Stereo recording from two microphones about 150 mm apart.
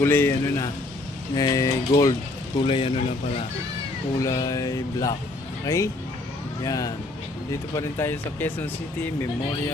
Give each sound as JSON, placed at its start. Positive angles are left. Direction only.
{"t": 0.0, "sound": "speech", "side_deg": 15}
{"t": 2.6, "sound": "speech", "side_deg": 35}
{"t": 4.2, "sound": "speech", "side_deg": 25}